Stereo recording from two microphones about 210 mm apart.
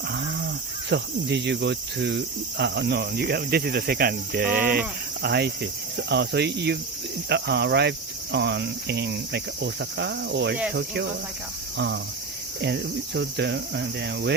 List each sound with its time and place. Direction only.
0.9 s speech: 55° right (ahead or behind)
12.6 s speech: 55° right (ahead or behind)